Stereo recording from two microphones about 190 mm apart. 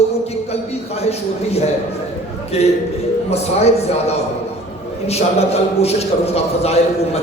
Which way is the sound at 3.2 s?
35° left (ahead or behind).